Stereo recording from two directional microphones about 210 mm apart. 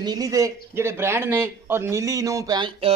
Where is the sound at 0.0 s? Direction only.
20° right (ahead or behind).